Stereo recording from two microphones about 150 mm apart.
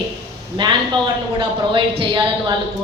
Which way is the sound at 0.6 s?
30° right (ahead or behind).